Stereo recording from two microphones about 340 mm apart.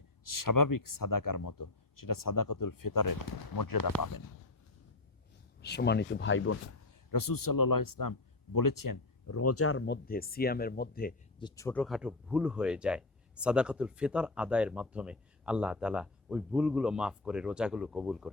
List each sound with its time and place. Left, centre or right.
0.3 s speech: left
5.6 s speech: left
7.1 s speech: left
9.3 s speech: left
11.3 s speech: centre